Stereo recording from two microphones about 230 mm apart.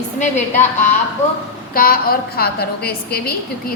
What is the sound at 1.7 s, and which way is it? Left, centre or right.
A woman's voice, left.